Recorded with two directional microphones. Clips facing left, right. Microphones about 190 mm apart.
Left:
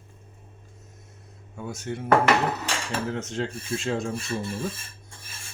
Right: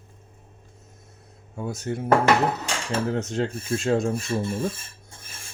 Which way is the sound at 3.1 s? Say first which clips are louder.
Right 4 dB; 40° right (ahead or behind).